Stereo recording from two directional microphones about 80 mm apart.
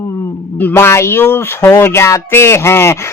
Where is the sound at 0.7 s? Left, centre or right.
Left.